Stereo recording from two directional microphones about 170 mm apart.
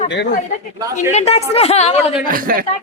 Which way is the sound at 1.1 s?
40° left (ahead or behind).